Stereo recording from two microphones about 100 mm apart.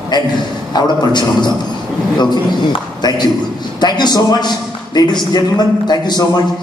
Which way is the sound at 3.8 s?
45° left (ahead or behind).